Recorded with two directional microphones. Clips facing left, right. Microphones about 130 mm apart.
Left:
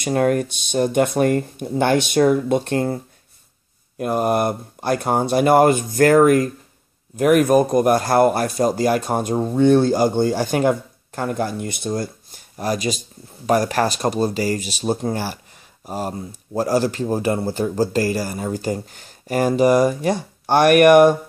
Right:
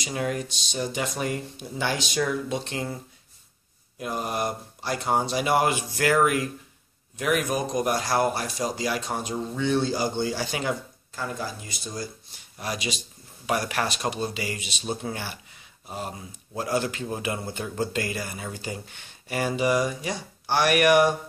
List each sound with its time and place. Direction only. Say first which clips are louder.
0.0 s speech: left 11 dB; 55° left (ahead or behind)
4.0 s a man's voice: left 10 dB; 55° left (ahead or behind)